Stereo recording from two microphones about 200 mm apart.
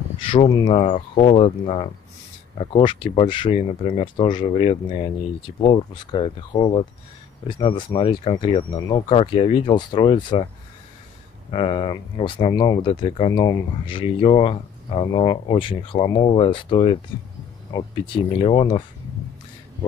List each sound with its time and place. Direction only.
0.2 s speech: 25° left (ahead or behind)
11.5 s speech: 25° left (ahead or behind)